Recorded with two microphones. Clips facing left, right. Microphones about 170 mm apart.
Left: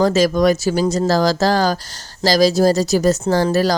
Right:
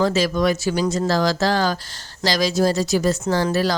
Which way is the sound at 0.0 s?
40° left (ahead or behind).